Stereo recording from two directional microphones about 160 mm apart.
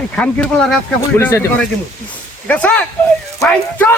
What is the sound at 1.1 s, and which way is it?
Speech, 15° left (ahead or behind).